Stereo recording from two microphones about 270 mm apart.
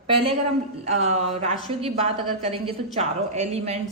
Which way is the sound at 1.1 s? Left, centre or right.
Right.